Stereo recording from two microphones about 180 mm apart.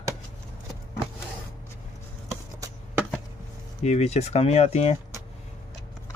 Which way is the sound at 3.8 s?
40° left (ahead or behind).